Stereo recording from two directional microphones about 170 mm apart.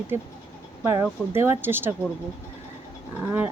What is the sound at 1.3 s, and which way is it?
Speech, 15° right (ahead or behind).